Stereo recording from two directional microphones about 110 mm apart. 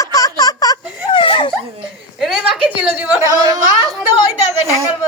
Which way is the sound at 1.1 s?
50° left (ahead or behind).